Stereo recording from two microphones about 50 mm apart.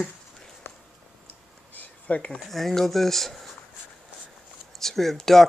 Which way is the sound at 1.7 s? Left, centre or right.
Left.